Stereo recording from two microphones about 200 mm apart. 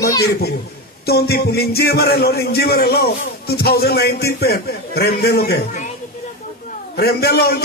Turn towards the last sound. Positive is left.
turn(degrees=50)  # may be behind; listen again after turning